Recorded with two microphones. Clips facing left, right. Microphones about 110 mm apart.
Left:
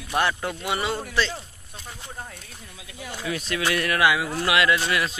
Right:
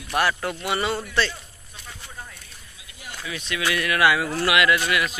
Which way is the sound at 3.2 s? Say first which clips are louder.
Left 1 dB; 45° left (ahead or behind).